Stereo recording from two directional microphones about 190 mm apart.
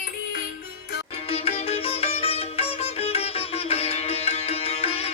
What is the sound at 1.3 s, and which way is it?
Sitar, 30° left (ahead or behind).